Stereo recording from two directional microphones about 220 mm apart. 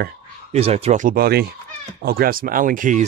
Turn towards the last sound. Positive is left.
turn(degrees=-35)  # may be behind; listen again after turning